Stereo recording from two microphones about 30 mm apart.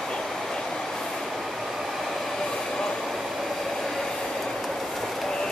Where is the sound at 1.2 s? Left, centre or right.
Centre.